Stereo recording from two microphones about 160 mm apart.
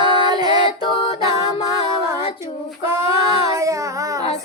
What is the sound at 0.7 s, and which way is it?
Music, 35° left (ahead or behind).